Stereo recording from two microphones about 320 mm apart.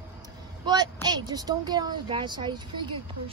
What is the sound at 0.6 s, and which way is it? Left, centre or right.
Speech, centre.